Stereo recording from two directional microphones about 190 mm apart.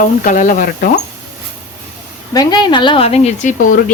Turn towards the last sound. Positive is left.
turn(degrees=40)  # may be behind; listen again after turning